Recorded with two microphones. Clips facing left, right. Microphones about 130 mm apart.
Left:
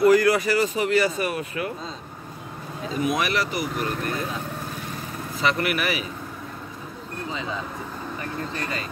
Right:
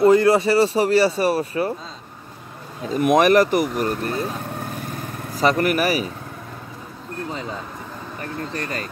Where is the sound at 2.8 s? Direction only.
50° right (ahead or behind).